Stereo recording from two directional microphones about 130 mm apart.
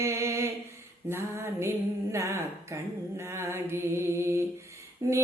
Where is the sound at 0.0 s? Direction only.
20° right (ahead or behind).